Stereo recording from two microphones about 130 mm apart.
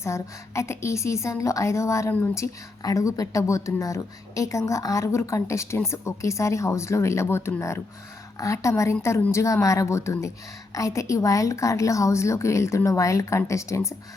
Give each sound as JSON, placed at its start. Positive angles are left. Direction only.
{"t": 0.0, "sound": "a woman's voice", "side_deg": 20}